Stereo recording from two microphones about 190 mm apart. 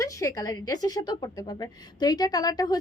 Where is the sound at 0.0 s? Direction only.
15° left (ahead or behind).